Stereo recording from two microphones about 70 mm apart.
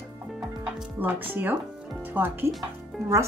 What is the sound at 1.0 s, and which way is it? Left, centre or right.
Speech, right.